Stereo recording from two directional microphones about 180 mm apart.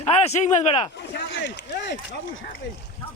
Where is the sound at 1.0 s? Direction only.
80° left.